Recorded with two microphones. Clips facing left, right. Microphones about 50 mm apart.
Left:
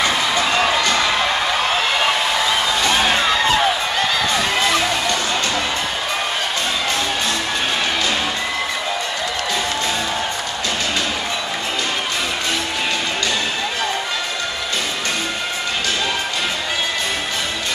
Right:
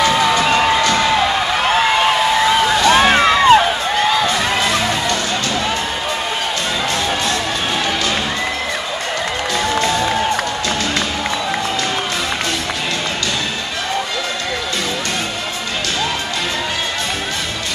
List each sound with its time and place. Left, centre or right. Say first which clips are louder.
0.3 s music: right 4 dB; right
2.8 s music: right 6 dB; right